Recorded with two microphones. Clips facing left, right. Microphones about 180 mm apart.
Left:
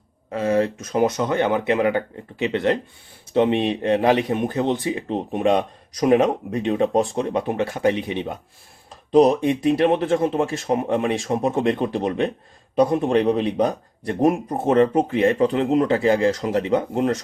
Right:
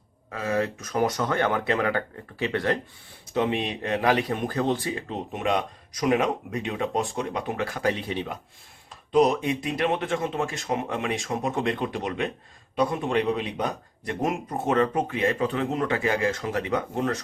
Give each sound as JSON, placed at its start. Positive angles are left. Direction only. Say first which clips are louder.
{"t": 0.3, "sound": "speech", "louder": "left 6 dB", "side_deg": 30}
{"t": 5.1, "sound": "a man's voice", "louder": "left 7 dB", "side_deg": 30}
{"t": 9.1, "sound": "a man's voice", "louder": "left 6 dB", "side_deg": 35}